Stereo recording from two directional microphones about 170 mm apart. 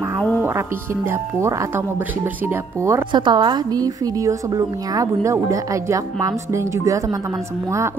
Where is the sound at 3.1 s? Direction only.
30° right (ahead or behind).